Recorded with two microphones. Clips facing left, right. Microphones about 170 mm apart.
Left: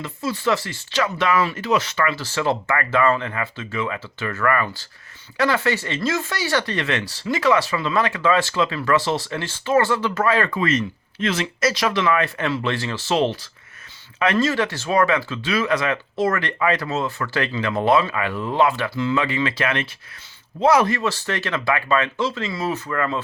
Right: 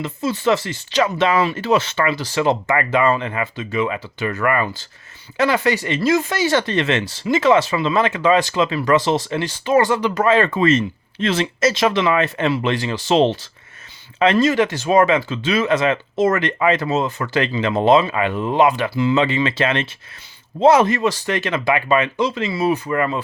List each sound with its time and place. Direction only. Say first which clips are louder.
0.0 s speech: right 4 dB; 20° right (ahead or behind)